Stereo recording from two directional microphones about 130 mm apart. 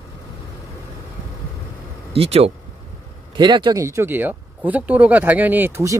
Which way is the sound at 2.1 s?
50° right (ahead or behind).